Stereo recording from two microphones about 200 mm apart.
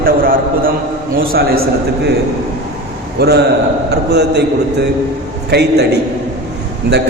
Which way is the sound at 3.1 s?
55° right (ahead or behind).